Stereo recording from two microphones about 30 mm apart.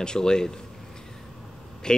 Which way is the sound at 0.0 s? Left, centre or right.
Left.